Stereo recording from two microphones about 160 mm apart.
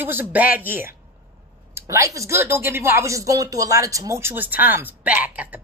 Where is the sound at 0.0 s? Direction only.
15° right (ahead or behind).